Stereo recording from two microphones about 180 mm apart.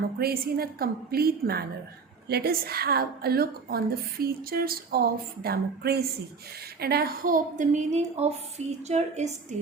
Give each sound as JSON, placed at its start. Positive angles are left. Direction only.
{"t": 0.2, "sound": "a woman's voice", "side_deg": -60}